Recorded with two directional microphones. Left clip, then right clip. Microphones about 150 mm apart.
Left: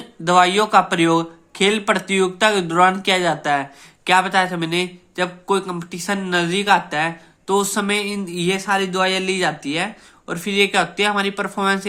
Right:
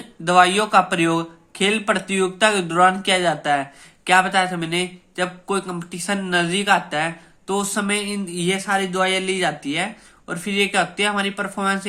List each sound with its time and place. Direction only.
0.3 s speech: 20° left (ahead or behind)